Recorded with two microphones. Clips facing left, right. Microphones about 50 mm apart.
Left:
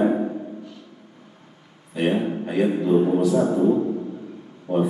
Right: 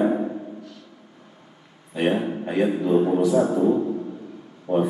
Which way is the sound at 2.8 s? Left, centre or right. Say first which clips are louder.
Left 1 dB; centre.